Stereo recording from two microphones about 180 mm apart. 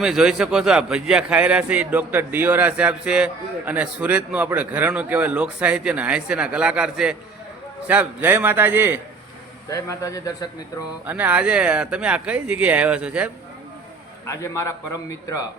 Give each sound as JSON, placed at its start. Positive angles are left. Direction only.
{"t": 0.0, "sound": "a man's voice", "side_deg": -5}
{"t": 9.6, "sound": "a man's voice", "side_deg": 20}
{"t": 11.0, "sound": "a man's voice", "side_deg": -10}
{"t": 14.3, "sound": "a man's voice", "side_deg": 15}